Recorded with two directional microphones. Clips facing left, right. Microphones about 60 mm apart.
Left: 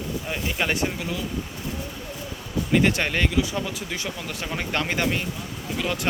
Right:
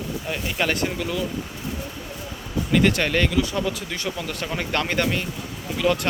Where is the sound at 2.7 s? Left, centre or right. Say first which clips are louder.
Right 2 dB; centre.